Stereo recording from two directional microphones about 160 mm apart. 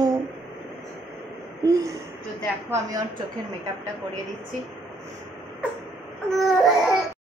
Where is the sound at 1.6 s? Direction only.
20° right (ahead or behind).